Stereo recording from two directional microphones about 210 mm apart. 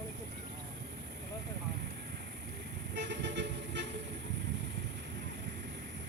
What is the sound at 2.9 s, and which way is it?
Toot, 55° right (ahead or behind).